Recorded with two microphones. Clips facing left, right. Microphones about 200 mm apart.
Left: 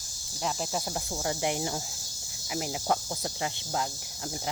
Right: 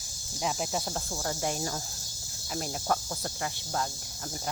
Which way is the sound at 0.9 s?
10° left (ahead or behind).